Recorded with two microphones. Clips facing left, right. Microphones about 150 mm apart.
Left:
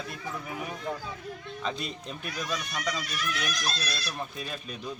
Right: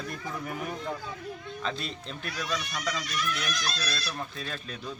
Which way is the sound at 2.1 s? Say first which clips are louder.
Right 1 dB; 15° left (ahead or behind).